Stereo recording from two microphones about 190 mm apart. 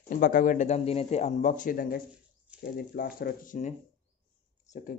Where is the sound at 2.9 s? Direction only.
50° left (ahead or behind).